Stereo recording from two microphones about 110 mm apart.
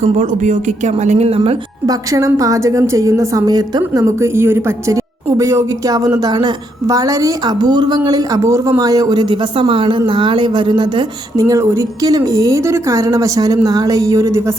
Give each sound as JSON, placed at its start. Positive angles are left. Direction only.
{"t": 0.0, "sound": "speech", "side_deg": -90}
{"t": 1.9, "sound": "a woman's voice", "side_deg": -30}
{"t": 11.3, "sound": "a woman's voice", "side_deg": -30}